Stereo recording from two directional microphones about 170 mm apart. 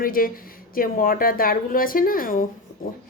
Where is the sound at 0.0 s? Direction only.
55° left (ahead or behind).